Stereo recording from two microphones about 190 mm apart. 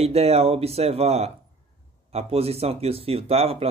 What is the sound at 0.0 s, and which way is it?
Speech, 35° right (ahead or behind).